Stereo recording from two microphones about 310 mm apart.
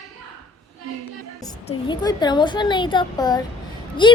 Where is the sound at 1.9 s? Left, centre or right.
Centre.